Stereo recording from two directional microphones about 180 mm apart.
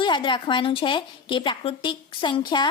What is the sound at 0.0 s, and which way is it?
A woman's voice, 25° left (ahead or behind).